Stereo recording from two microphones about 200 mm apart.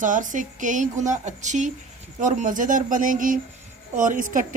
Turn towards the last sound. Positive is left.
turn(degrees=-40)  # may be behind; listen again after turning